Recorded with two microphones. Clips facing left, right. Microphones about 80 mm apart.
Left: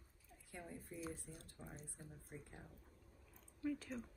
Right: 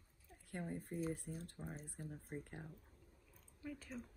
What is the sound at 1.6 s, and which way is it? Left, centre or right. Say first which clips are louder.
Speech: right 6 dB; right.